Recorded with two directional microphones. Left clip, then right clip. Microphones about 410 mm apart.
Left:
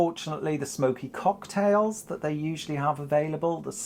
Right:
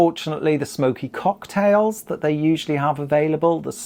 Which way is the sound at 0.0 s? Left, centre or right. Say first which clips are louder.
Right 9 dB; right.